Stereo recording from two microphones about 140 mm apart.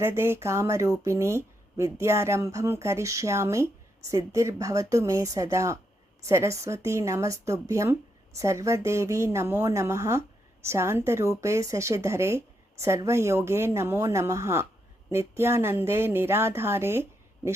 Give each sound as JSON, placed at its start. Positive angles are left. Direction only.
{"t": 0.0, "sound": "speech", "side_deg": -15}